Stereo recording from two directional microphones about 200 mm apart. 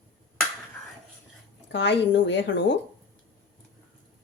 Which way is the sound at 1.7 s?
60° left (ahead or behind).